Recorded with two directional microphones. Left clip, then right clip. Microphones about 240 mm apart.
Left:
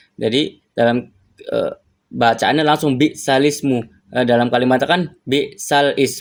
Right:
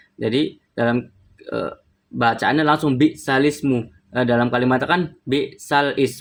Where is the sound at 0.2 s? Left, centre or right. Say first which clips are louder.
Left 3 dB; centre.